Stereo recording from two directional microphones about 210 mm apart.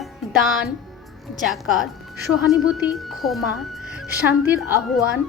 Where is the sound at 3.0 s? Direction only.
Centre (ahead or behind).